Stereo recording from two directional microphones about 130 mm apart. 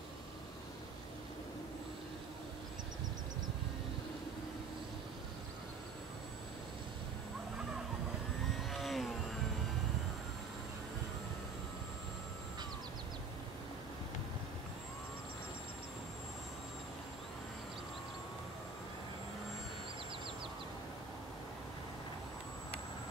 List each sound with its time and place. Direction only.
8.6 s vehicle: centre (ahead or behind)